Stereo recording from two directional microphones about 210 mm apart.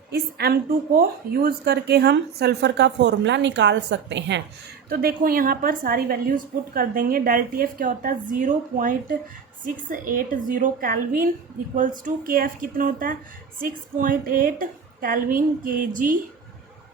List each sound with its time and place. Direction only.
0.1 s a woman's voice: 50° right (ahead or behind)
4.9 s a woman's voice: 45° right (ahead or behind)